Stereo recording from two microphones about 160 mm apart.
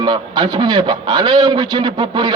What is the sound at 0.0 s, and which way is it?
A man's voice, 25° right (ahead or behind).